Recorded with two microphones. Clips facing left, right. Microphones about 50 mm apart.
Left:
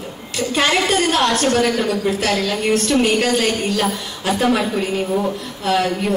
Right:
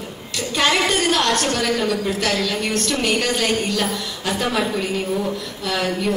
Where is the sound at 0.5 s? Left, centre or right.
Left.